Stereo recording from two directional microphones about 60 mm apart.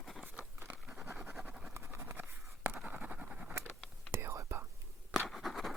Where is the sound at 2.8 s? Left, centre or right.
Right.